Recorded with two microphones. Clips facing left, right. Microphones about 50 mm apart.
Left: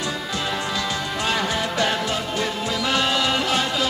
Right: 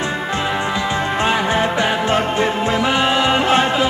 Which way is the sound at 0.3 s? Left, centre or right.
Right.